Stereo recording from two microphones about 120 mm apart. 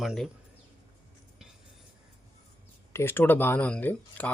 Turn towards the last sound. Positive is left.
turn(degrees=15)  # may be behind; listen again after turning